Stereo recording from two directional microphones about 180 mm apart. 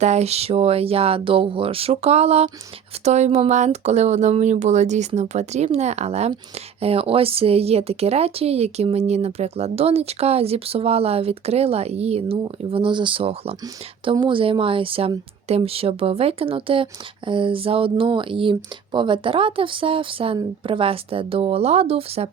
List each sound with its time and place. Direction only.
0.0 s a woman's voice: 40° right (ahead or behind)